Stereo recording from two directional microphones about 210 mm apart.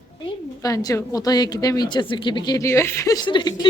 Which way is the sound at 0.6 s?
15° left (ahead or behind).